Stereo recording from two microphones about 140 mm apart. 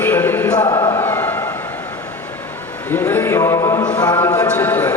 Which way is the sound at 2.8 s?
15° left (ahead or behind).